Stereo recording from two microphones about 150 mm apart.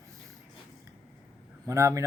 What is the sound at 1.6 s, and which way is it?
Speech, 20° right (ahead or behind).